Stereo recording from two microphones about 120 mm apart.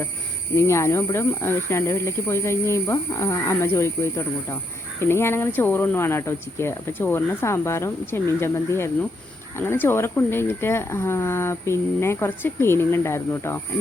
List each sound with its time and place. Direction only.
0.5 s speech: 20° left (ahead or behind)